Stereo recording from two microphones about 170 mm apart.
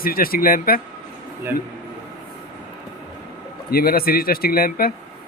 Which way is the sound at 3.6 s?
65° left (ahead or behind).